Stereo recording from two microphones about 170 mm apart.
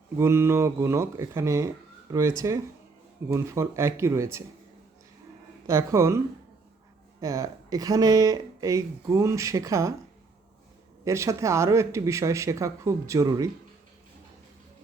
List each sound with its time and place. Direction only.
0.2 s speech: 15° right (ahead or behind)
5.6 s speech: 15° right (ahead or behind)
7.2 s speech: 20° right (ahead or behind)
11.0 s speech: 15° right (ahead or behind)